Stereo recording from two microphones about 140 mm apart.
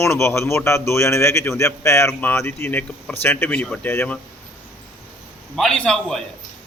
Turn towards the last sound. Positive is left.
turn(degrees=5)  # may be behind; listen again after turning